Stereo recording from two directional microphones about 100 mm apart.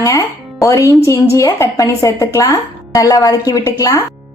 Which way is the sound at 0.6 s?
35° left (ahead or behind).